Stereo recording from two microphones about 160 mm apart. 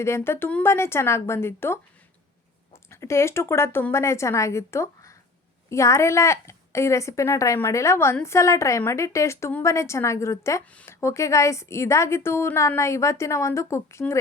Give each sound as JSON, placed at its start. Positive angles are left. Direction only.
{"t": 0.0, "sound": "a woman's voice", "side_deg": 15}
{"t": 2.9, "sound": "a woman's voice", "side_deg": 15}